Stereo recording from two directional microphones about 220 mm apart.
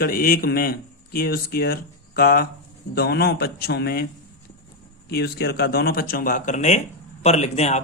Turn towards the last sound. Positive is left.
turn(degrees=30)  # may be behind; listen again after turning